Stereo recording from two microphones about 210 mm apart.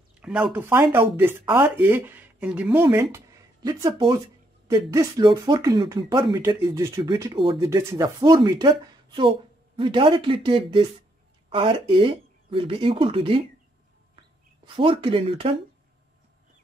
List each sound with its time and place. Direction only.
0.2 s speech: 5° right (ahead or behind); by 13.4 s 25° right (ahead or behind)
14.8 s speech: 25° right (ahead or behind)